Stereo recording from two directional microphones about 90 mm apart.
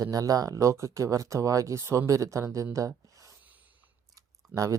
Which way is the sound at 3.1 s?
40° right (ahead or behind).